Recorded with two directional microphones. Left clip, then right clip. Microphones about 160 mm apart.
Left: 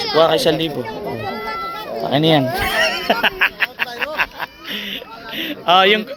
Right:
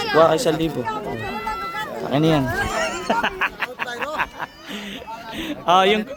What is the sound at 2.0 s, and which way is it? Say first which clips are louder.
Speech: left 5 dB; 10° right (ahead or behind).